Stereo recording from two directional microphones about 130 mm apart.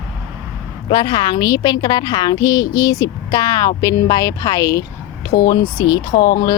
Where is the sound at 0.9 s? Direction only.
35° left (ahead or behind).